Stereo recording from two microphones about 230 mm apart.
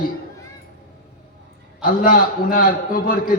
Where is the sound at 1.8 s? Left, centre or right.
Left.